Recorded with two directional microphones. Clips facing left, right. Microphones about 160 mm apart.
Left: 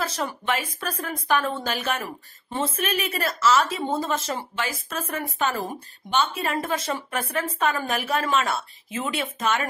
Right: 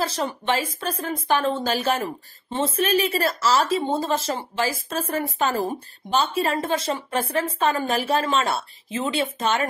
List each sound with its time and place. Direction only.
0.0 s a woman's voice: 30° right (ahead or behind)